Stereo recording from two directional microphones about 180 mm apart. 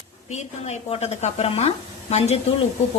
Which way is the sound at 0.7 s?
35° left (ahead or behind).